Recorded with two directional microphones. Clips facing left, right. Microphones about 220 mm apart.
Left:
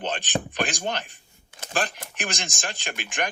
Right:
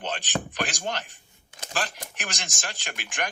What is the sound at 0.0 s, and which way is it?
A man's voice, 15° left (ahead or behind).